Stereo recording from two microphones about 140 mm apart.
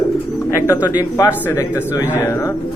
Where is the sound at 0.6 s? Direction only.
25° left (ahead or behind).